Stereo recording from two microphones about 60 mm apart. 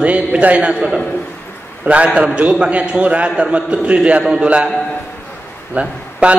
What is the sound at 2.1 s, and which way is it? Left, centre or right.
A man's voice, centre.